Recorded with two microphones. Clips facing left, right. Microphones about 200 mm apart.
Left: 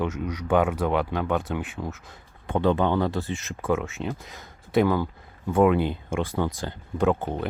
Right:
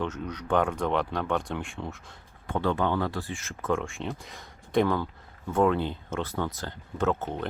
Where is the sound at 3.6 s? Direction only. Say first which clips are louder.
Left 2 dB; 5° left (ahead or behind).